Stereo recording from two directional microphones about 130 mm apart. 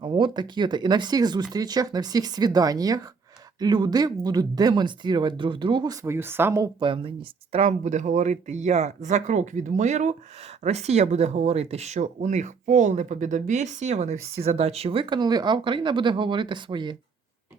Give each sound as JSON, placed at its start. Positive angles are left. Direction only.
{"t": 0.0, "sound": "speech", "side_deg": -35}
{"t": 6.7, "sound": "speech", "side_deg": -40}
{"t": 7.5, "sound": "speech", "side_deg": -60}